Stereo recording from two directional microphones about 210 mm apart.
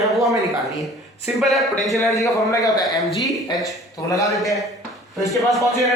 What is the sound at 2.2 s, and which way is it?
Speech, 15° left (ahead or behind).